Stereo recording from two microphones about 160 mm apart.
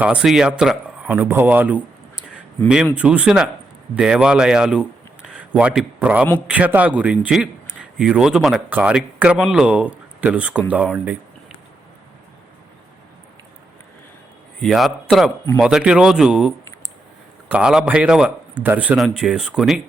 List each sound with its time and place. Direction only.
0.0 s a man's voice: 5° right (ahead or behind)
14.6 s a man's voice: centre (ahead or behind)
17.5 s a man's voice: 5° right (ahead or behind)